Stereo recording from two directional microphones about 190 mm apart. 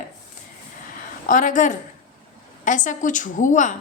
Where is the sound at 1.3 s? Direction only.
40° left (ahead or behind).